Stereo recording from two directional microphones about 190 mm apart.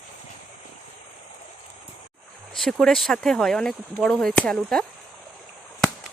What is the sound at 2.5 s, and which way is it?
Speech, centre (ahead or behind).